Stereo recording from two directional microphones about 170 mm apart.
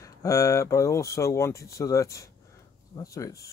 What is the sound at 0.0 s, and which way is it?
Speech, 20° left (ahead or behind).